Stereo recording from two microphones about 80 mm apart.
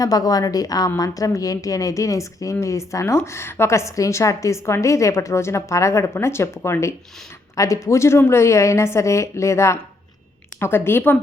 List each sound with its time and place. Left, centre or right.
0.0 s a woman's voice: left